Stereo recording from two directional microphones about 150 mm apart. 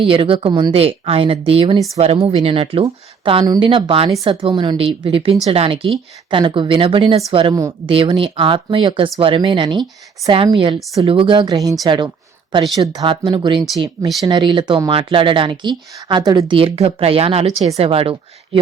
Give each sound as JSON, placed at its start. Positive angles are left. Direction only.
{"t": 0.0, "sound": "speech", "side_deg": -35}